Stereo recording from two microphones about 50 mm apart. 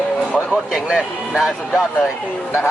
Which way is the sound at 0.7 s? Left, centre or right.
Centre.